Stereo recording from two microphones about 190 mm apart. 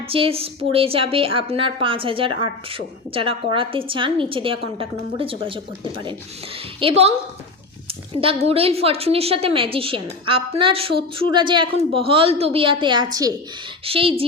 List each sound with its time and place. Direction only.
0.1 s a woman's voice: 30° right (ahead or behind)